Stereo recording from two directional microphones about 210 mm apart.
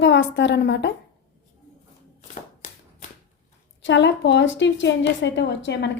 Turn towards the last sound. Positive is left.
turn(degrees=55)  # may be behind; listen again after turning